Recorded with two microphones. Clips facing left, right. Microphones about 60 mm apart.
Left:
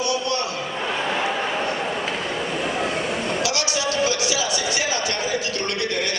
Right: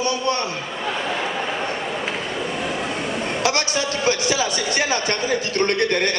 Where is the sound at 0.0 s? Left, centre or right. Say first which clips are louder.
Right 2 dB; right.